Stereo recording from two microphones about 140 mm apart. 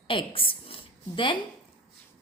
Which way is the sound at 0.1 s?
40° left (ahead or behind).